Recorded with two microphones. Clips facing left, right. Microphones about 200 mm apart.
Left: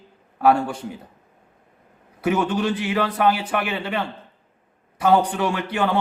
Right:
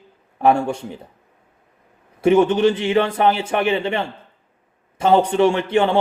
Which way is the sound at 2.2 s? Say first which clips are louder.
Right 7 dB; 25° right (ahead or behind).